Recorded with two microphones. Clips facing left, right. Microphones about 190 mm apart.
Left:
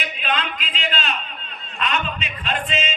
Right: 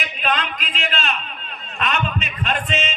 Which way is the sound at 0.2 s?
45° right (ahead or behind).